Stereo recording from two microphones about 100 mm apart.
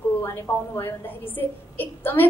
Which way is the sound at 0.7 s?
20° left (ahead or behind).